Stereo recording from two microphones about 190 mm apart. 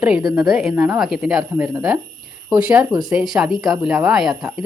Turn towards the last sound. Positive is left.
turn(degrees=0)  # may be behind; listen again after turning